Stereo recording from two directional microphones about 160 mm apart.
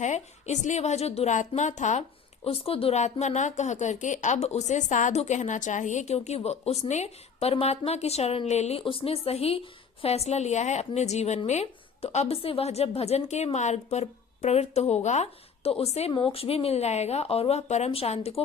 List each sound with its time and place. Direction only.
0.0 s a woman's voice: 45° left (ahead or behind)